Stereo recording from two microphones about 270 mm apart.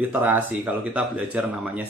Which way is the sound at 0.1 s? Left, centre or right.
Centre.